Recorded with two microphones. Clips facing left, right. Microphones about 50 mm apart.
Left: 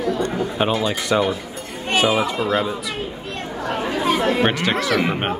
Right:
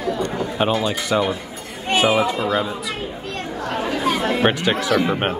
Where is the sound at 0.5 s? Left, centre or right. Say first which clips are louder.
Even; centre.